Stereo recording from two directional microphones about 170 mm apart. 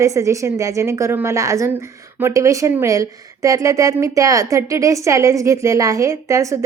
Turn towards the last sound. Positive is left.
turn(degrees=-20)  # may be behind; listen again after turning